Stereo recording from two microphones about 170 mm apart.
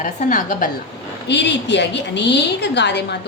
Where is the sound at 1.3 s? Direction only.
90° left.